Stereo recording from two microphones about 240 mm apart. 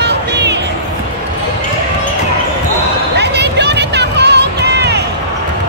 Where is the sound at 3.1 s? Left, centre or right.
Right.